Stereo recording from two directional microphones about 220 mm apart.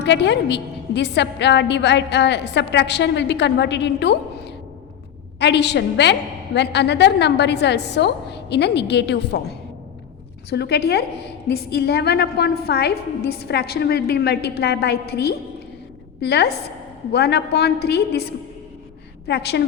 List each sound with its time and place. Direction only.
0.0 s a woman's voice: 50° left (ahead or behind)
19.3 s a woman's voice: 50° left (ahead or behind)